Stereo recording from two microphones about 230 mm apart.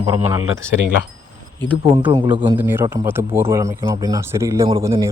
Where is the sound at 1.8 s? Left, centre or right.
Centre.